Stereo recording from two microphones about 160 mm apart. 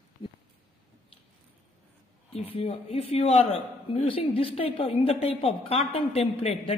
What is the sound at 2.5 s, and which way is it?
A man's voice, 40° left (ahead or behind).